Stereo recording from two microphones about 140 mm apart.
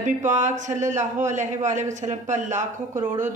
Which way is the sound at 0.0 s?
60° right (ahead or behind).